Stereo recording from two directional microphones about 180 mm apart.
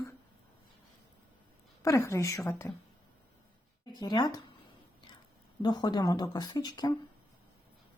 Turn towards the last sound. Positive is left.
turn(degrees=25)  # may be behind; listen again after turning